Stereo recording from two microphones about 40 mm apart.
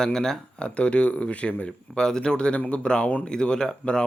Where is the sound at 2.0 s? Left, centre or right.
Centre.